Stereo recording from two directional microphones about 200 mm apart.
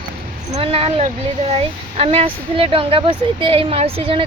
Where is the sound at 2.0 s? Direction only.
30° right (ahead or behind).